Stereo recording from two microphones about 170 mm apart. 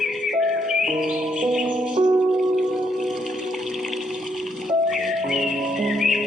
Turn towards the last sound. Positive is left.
turn(degrees=0)  # may be behind; listen again after turning